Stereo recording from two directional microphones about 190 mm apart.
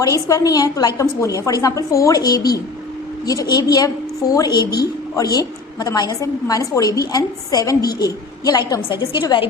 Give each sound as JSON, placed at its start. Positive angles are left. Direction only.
{"t": 0.0, "sound": "a woman's voice", "side_deg": 15}